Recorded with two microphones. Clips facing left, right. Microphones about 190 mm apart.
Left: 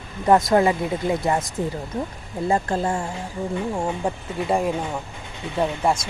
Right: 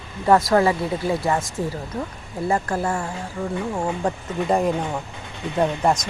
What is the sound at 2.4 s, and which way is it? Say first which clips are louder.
Speech: left 1 dB; 25° left (ahead or behind).